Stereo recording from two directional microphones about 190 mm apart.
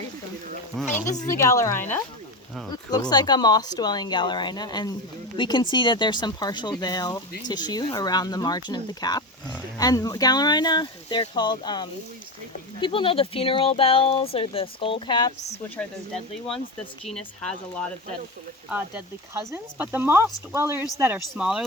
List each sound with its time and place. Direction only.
1.0 s speech: 40° left (ahead or behind)
1.3 s speech: 15° left (ahead or behind)
15.8 s speech: centre (ahead or behind)
18.7 s speech: 10° right (ahead or behind)